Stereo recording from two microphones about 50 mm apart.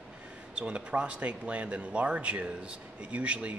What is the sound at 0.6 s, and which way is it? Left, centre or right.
Speech, right.